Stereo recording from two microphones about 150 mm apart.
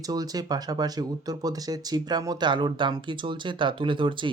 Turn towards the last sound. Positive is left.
turn(degrees=-35)  # may be behind; listen again after turning